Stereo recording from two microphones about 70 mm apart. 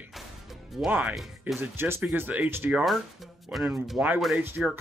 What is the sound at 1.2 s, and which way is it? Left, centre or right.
Speech, centre.